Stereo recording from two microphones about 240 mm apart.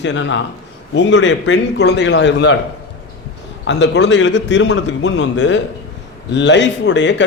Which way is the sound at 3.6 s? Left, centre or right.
Left.